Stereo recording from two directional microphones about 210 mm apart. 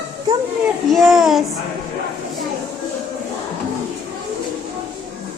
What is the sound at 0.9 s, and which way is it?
Child singing, centre (ahead or behind).